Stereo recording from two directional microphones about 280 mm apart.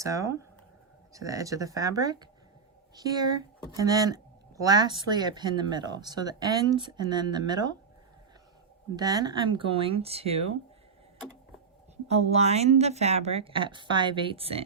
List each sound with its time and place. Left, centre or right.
0.0 s speech: centre
9.0 s a woman's voice: centre
12.1 s a woman's voice: right